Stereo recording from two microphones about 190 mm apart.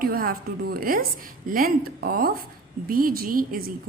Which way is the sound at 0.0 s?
50° right (ahead or behind).